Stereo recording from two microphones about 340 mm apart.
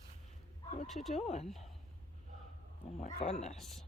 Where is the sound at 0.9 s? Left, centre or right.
Centre.